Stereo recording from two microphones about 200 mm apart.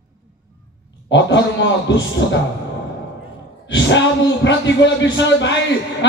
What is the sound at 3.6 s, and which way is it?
A man's voice, 60° left (ahead or behind).